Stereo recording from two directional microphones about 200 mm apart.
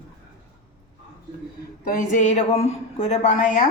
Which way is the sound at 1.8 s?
40° left (ahead or behind).